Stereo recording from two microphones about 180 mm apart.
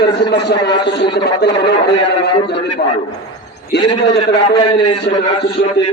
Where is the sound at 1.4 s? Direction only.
70° left (ahead or behind).